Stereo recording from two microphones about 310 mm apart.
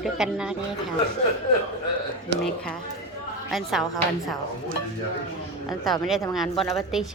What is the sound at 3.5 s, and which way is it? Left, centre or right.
Speech, centre.